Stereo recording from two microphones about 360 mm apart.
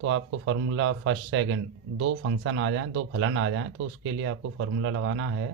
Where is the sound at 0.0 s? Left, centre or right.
Right.